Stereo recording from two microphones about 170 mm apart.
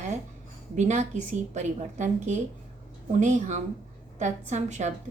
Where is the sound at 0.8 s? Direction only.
45° right (ahead or behind).